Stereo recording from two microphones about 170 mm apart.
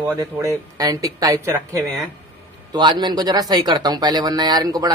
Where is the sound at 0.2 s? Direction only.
20° right (ahead or behind).